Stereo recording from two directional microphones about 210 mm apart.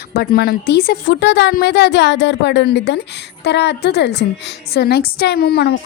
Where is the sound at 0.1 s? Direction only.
50° left (ahead or behind).